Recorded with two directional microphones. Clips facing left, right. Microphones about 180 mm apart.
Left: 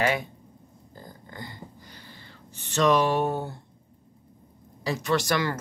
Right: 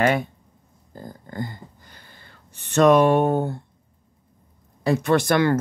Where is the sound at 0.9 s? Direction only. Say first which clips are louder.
Right 10 dB; 50° right (ahead or behind).